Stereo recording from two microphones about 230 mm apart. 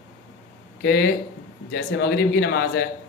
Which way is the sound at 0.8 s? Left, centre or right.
Left.